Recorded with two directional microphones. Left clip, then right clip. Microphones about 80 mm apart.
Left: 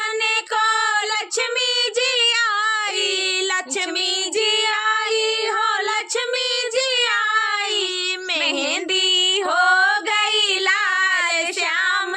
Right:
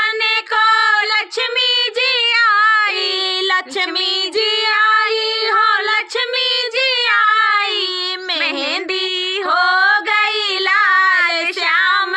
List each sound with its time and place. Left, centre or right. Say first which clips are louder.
0.5 s female singing: right 8 dB; left
1.5 s child singing: right 5 dB; left
4.4 s female singing: right 3 dB; right
5.5 s music: right 10 dB; left
6.7 s child singing: right 2 dB; right
7.2 s child singing: right 7 dB; left
9.5 s child singing: right 5 dB; right
10.7 s child singing: right 6 dB; left